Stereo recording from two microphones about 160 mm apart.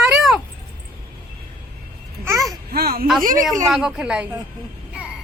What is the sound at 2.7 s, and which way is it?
Speech, 70° right (ahead or behind).